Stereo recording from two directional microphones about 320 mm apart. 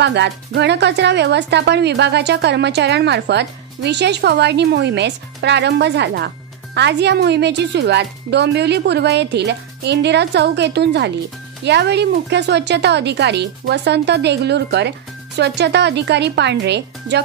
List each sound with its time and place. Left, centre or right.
0.0 s speech: right